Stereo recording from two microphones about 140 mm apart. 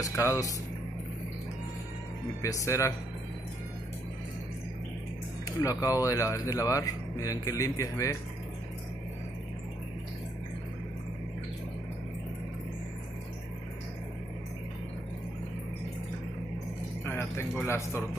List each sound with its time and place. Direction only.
0.0 s speech: 25° left (ahead or behind)
2.4 s speech: 20° left (ahead or behind)
5.6 s speech: 25° left (ahead or behind)
17.0 s a man's voice: 15° left (ahead or behind)